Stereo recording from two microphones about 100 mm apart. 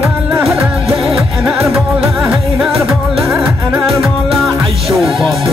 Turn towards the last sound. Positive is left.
turn(degrees=0)  # may be behind; listen again after turning